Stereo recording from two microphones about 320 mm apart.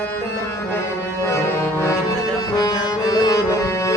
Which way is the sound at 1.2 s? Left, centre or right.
Centre.